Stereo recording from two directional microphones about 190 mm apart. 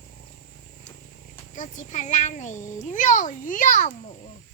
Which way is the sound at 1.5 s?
40° left (ahead or behind).